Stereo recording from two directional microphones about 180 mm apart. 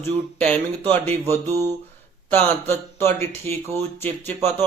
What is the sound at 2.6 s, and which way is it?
Speech, 15° left (ahead or behind).